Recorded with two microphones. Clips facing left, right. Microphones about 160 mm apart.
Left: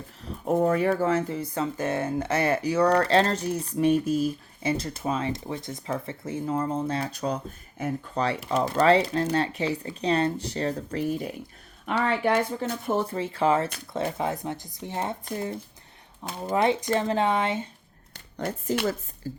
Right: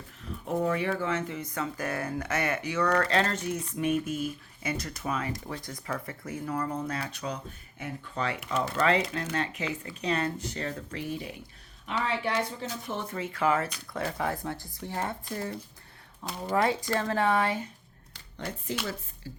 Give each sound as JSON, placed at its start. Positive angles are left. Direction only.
{"t": 0.2, "sound": "a sound", "side_deg": 35}
{"t": 0.5, "sound": "speech", "side_deg": 40}
{"t": 7.0, "sound": "speech", "side_deg": 40}
{"t": 13.0, "sound": "speech", "side_deg": 30}
{"t": 16.4, "sound": "speech", "side_deg": 20}
{"t": 18.1, "sound": "speech", "side_deg": 50}
{"t": 19.3, "sound": "music", "side_deg": 40}